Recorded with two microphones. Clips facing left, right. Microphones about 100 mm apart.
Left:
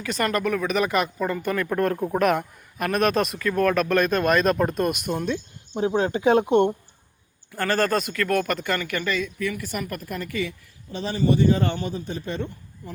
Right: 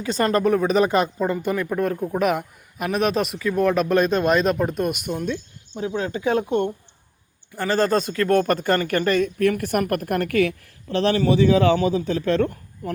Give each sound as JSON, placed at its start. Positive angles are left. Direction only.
{"t": 0.0, "sound": "speech", "side_deg": -25}
{"t": 1.7, "sound": "speech", "side_deg": -5}
{"t": 4.5, "sound": "speech", "side_deg": -5}
{"t": 5.7, "sound": "speech", "side_deg": 35}
{"t": 7.5, "sound": "speech", "side_deg": -15}
{"t": 8.0, "sound": "speech", "side_deg": -30}